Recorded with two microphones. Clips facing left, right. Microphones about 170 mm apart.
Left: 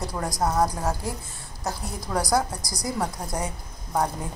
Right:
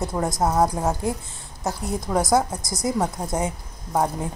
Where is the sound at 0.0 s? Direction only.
25° right (ahead or behind).